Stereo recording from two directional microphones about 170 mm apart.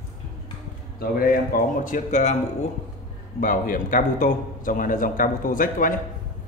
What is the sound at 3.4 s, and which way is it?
A man's voice, 55° left (ahead or behind).